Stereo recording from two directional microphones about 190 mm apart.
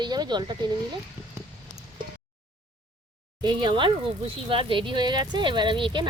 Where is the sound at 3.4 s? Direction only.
25° right (ahead or behind).